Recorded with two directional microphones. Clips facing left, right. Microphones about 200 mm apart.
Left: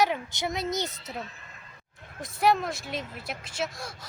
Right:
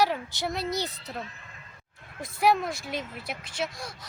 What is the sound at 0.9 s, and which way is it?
Speech, centre (ahead or behind).